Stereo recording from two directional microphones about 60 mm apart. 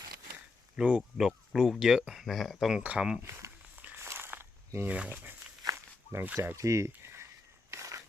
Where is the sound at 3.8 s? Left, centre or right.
Right.